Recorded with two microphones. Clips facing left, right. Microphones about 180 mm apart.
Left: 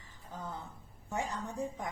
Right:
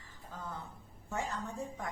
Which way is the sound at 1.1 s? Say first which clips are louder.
Left 1 dB; 15° left (ahead or behind).